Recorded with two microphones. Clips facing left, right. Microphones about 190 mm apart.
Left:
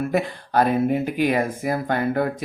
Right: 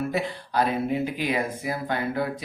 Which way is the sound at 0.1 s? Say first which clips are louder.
Left 5 dB; 50° left (ahead or behind).